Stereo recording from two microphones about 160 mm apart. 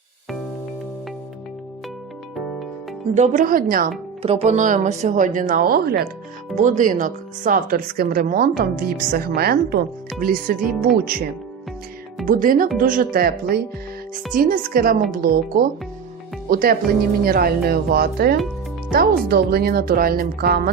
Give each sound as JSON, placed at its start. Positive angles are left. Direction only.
{"t": 3.2, "sound": "a woman's voice", "side_deg": -60}
{"t": 4.2, "sound": "speech", "side_deg": -40}
{"t": 6.6, "sound": "a woman's voice", "side_deg": -50}
{"t": 10.2, "sound": "a woman's voice", "side_deg": -60}
{"t": 12.2, "sound": "a woman's voice", "side_deg": -60}
{"t": 13.1, "sound": "speech", "side_deg": -70}
{"t": 14.3, "sound": "a woman's voice", "side_deg": -60}
{"t": 16.5, "sound": "speech", "side_deg": -70}